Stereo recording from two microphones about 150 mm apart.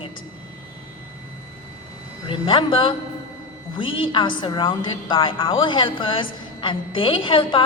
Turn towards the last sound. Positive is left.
turn(degrees=35)  # may be behind; listen again after turning